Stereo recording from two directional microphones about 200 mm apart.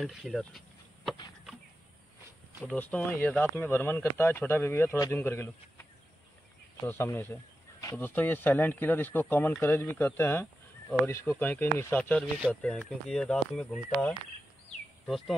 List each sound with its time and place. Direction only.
0.0 s speech: centre (ahead or behind)
2.6 s speech: 10° left (ahead or behind)
6.9 s speech: 10° left (ahead or behind)
15.0 s speech: centre (ahead or behind)